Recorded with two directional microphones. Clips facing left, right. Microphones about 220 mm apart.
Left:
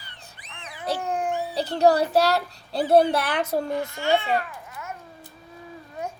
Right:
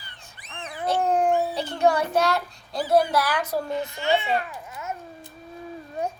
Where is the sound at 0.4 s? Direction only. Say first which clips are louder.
Right 2 dB; 45° right (ahead or behind).